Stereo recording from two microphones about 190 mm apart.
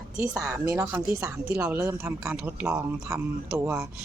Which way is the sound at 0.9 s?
15° right (ahead or behind).